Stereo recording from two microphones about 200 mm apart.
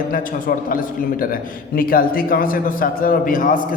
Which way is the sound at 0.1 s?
45° left (ahead or behind).